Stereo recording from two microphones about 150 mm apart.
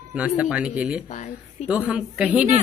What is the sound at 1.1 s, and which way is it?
Speech, 55° left (ahead or behind).